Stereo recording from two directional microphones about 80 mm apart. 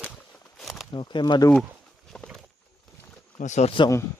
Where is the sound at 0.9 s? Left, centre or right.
Left.